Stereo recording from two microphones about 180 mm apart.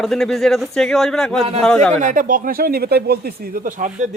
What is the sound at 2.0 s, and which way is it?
Speech, 50° right (ahead or behind).